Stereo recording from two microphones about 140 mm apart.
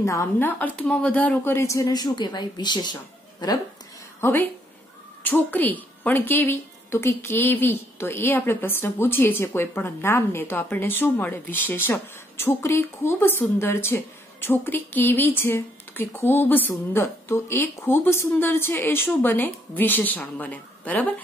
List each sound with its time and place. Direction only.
0.0 s speech: 20° left (ahead or behind)
4.2 s a woman's voice: 15° left (ahead or behind)